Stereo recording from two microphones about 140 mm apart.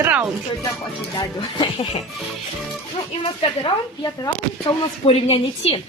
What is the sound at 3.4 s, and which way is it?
A woman's voice, 35° left (ahead or behind).